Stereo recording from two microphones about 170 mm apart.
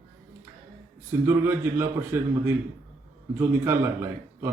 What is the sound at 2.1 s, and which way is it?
Speech, 15° right (ahead or behind).